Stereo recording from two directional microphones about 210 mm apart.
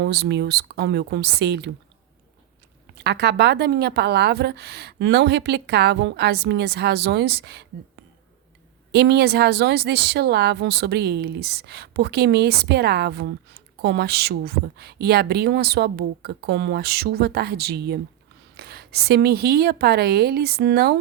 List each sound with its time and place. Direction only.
0.0 s speech: 50° right (ahead or behind)
2.9 s speech: 50° right (ahead or behind)
8.9 s speech: 50° right (ahead or behind)